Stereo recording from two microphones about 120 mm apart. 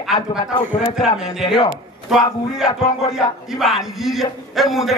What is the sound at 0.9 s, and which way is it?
A man's voice, 5° right (ahead or behind).